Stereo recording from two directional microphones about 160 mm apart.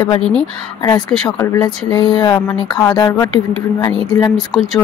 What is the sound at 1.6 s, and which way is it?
Speech, 25° left (ahead or behind).